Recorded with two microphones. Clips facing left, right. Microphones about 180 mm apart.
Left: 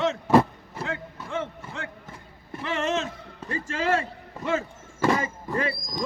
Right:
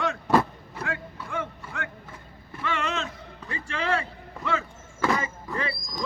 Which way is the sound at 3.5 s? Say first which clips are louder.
Left 3 dB; 45° left (ahead or behind).